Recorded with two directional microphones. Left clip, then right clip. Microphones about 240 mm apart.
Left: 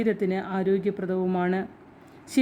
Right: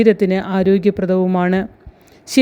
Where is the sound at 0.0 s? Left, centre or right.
Right.